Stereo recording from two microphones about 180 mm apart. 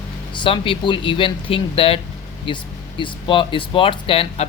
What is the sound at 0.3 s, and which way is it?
Speech, 30° left (ahead or behind).